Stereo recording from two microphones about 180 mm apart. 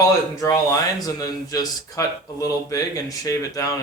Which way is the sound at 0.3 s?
20° left (ahead or behind).